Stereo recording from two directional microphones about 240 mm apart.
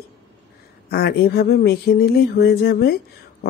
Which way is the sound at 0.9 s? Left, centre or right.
Left.